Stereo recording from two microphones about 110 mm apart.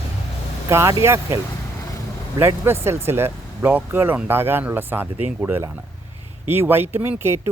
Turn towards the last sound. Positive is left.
turn(degrees=-20)  # may be behind; listen again after turning